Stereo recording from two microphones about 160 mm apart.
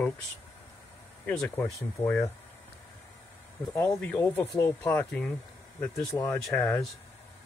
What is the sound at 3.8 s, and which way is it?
Speech, 10° left (ahead or behind).